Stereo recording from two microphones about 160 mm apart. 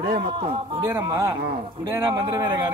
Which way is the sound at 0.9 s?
15° right (ahead or behind).